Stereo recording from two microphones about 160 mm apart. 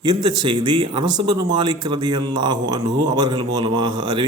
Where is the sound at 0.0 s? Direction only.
25° right (ahead or behind).